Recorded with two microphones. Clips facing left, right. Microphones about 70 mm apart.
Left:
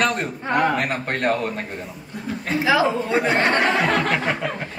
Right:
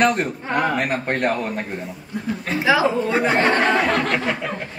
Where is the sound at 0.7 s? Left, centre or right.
Centre.